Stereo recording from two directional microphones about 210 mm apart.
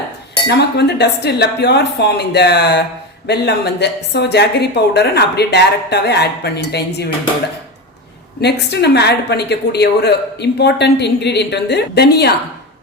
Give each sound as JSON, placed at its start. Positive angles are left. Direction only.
{"t": 0.4, "sound": "a woman's voice", "side_deg": 50}
{"t": 8.4, "sound": "a woman's voice", "side_deg": 50}